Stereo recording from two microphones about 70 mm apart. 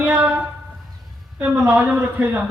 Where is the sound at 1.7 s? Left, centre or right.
Right.